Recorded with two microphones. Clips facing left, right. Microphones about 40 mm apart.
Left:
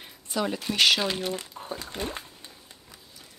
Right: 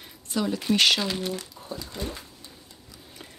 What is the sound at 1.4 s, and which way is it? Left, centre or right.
Speech, left.